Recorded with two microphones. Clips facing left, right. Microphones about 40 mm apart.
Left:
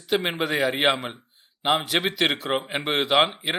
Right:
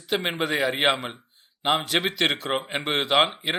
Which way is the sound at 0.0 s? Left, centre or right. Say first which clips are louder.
Left 1 dB; centre.